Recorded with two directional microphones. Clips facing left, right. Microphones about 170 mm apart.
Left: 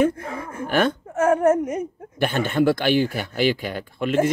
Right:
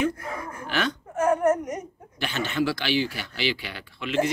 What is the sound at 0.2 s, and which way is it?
Speech, 25° left (ahead or behind).